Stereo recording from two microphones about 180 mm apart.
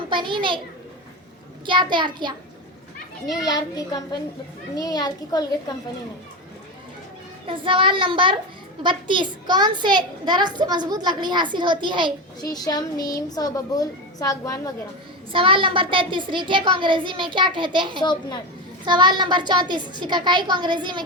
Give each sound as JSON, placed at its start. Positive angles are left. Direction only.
{"t": 0.1, "sound": "a child's voice", "side_deg": -25}
{"t": 1.6, "sound": "a child's voice", "side_deg": -25}
{"t": 3.4, "sound": "a child's voice", "side_deg": 20}
{"t": 7.4, "sound": "a child's voice", "side_deg": -30}
{"t": 12.4, "sound": "a child's voice", "side_deg": 20}
{"t": 15.3, "sound": "a child's voice", "side_deg": -30}
{"t": 18.0, "sound": "a child's voice", "side_deg": 25}
{"t": 18.9, "sound": "a child's voice", "side_deg": -25}